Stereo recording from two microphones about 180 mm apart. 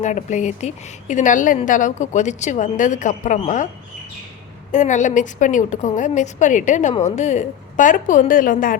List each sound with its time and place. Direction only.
0.0 s a woman's voice: 40° left (ahead or behind)
4.7 s a woman's voice: 45° left (ahead or behind)